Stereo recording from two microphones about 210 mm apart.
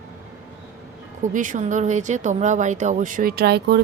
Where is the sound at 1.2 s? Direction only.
40° right (ahead or behind).